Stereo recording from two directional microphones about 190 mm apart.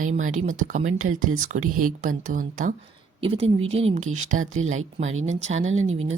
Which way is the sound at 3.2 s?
30° right (ahead or behind).